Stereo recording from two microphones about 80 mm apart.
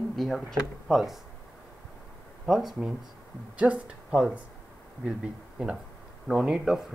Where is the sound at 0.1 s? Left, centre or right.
Centre.